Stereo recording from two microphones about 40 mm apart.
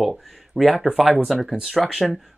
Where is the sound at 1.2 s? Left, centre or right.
Centre.